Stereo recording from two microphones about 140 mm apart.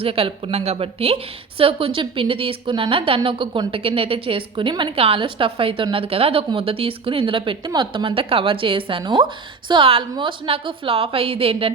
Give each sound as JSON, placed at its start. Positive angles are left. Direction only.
{"t": 0.0, "sound": "a woman's voice", "side_deg": -40}